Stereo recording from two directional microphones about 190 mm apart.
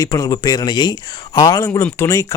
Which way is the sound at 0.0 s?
20° left (ahead or behind).